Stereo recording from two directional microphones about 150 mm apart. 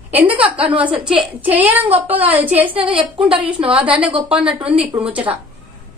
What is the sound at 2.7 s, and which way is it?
Speech, 35° right (ahead or behind).